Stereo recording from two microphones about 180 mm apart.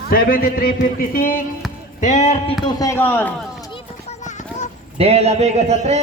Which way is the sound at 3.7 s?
40° left (ahead or behind).